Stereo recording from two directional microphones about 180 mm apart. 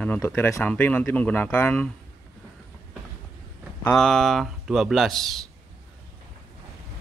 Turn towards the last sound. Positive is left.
turn(degrees=0)  # may be behind; listen again after turning